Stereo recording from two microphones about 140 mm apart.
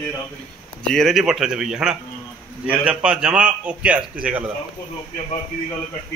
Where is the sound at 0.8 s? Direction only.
5° left (ahead or behind).